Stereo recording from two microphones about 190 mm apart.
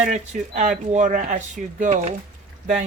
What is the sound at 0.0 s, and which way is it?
Speech, 40° right (ahead or behind).